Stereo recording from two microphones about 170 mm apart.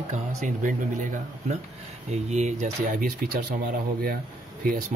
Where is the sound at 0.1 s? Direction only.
50° right (ahead or behind).